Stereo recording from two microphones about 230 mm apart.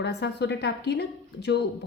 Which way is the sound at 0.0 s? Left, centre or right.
Left.